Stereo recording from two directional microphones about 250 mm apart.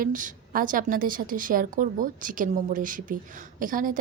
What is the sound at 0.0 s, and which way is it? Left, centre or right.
A woman's voice, right.